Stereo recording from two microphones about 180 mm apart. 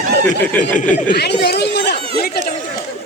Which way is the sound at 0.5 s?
10° left (ahead or behind).